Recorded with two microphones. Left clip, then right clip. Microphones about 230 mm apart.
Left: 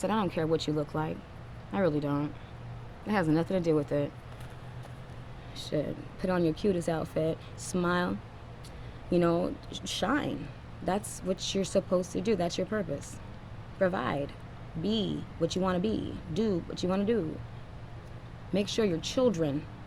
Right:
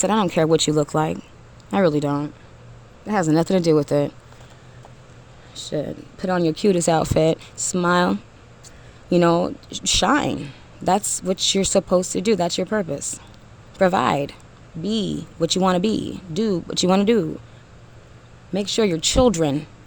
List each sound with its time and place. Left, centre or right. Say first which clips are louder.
0.0 s speech: right 11 dB; right
5.5 s speech: right 6 dB; right
18.5 s speech: right 8 dB; right